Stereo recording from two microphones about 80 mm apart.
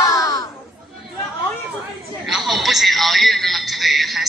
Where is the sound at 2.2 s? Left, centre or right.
Centre.